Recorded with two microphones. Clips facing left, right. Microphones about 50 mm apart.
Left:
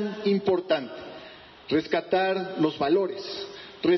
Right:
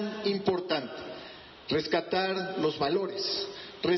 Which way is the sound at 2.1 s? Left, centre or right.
Centre.